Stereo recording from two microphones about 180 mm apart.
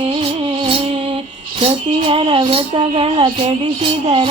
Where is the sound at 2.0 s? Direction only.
30° right (ahead or behind).